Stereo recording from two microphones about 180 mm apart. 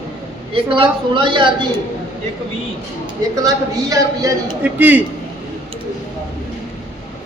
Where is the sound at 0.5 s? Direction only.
30° right (ahead or behind).